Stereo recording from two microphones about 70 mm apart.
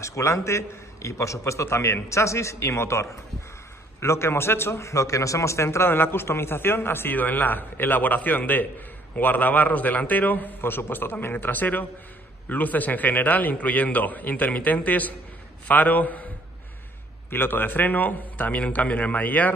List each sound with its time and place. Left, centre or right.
0.0 s a man's voice: left
17.3 s a man's voice: left